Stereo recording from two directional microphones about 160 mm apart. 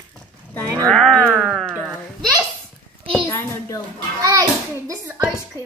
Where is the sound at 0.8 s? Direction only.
5° left (ahead or behind).